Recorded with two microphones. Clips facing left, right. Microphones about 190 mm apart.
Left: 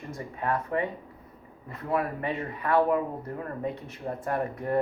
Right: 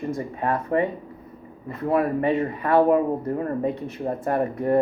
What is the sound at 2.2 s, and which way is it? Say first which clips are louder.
Speech: right 9 dB; 30° right (ahead or behind).